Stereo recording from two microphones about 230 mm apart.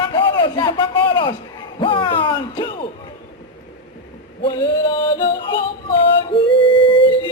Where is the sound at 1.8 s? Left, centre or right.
Left.